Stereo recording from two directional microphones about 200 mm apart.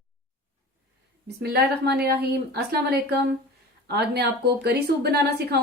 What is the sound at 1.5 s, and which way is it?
Speech, 55° right (ahead or behind).